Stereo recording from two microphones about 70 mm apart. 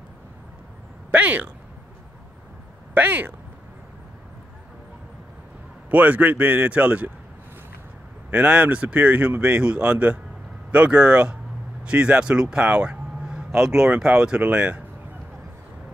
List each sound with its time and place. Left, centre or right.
1.1 s speech: right
2.9 s speech: right
5.9 s speech: right
8.3 s speech: right